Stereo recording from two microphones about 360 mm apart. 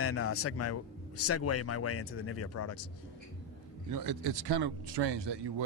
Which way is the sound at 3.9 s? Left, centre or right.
Right.